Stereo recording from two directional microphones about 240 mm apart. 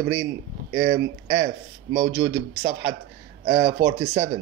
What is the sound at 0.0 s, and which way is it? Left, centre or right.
A man's voice, right.